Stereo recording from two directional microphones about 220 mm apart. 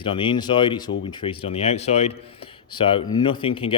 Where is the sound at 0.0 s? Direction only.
25° left (ahead or behind).